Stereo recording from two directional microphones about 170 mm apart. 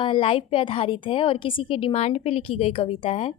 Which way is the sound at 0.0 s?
30° left (ahead or behind).